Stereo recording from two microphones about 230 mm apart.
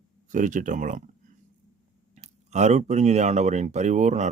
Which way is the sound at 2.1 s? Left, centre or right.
Right.